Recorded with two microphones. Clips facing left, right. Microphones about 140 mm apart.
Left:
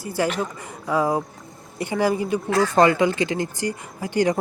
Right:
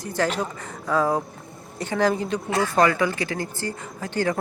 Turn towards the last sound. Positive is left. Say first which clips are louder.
# left 4 dB
turn(degrees=15)  # may be behind; listen again after turning